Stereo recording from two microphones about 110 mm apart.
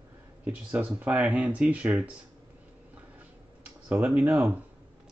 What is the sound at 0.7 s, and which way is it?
Speech, 15° right (ahead or behind).